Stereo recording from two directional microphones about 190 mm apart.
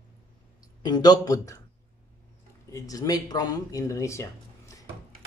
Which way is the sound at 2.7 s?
20° left (ahead or behind).